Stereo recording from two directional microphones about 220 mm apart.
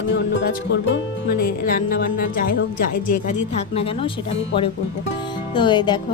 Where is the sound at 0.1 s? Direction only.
50° left (ahead or behind).